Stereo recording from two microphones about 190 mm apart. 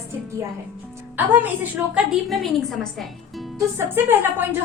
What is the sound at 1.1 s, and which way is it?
A woman's voice, 10° right (ahead or behind).